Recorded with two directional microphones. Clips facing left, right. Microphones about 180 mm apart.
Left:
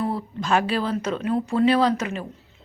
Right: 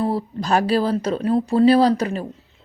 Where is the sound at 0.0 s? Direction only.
35° right (ahead or behind).